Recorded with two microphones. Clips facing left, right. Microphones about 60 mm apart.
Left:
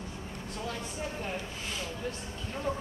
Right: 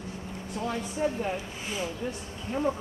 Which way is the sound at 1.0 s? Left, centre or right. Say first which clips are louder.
Right 11 dB; right.